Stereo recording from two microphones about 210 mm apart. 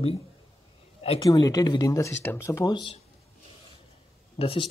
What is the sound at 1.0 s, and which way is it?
Speech, 20° left (ahead or behind).